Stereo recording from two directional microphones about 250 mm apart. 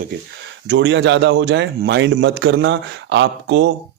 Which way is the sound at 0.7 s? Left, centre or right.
Right.